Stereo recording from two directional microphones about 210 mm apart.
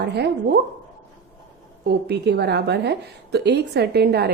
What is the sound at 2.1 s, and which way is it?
A woman's voice, 50° right (ahead or behind).